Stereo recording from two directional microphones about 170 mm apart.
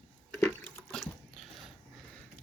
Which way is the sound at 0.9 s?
5° left (ahead or behind).